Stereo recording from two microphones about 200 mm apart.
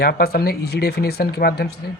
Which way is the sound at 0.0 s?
50° left (ahead or behind).